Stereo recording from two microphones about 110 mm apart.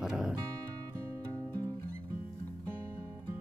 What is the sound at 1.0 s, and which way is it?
Music, 30° right (ahead or behind).